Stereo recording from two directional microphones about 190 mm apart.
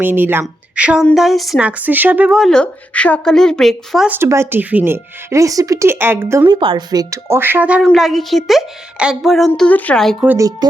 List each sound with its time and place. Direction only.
0.0 s a woman's voice: 10° right (ahead or behind)
6.6 s a woman's voice: 25° right (ahead or behind); by 10.2 s centre (ahead or behind)
10.2 s a woman's voice: 15° right (ahead or behind)